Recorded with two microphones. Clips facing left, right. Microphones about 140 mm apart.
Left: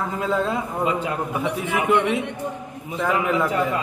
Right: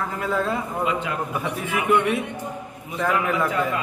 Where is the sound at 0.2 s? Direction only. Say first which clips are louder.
Left 1 dB; 20° left (ahead or behind).